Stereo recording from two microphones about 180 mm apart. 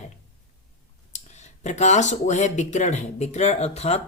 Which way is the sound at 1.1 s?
40° left (ahead or behind).